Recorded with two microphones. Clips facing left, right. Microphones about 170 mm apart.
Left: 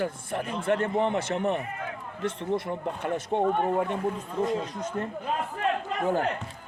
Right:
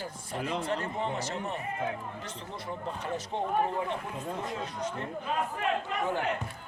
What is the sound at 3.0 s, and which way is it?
Speech, 55° left (ahead or behind).